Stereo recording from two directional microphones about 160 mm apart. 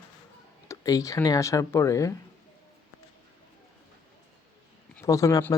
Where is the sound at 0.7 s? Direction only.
20° left (ahead or behind).